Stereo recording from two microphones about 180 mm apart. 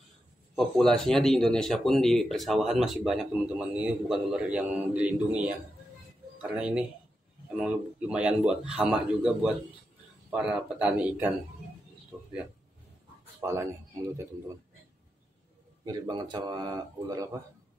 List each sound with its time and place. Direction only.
0.6 s a man's voice: centre (ahead or behind)
6.5 s a man's voice: 5° right (ahead or behind)
12.1 s a sound: 15° right (ahead or behind)
13.4 s speech: 15° right (ahead or behind)
15.8 s speech: 25° right (ahead or behind)